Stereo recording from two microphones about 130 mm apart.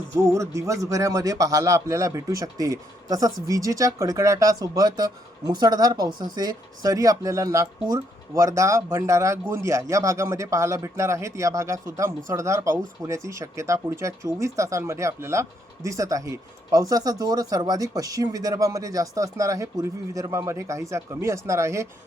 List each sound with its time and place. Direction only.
0.2 s a man's voice: 25° right (ahead or behind)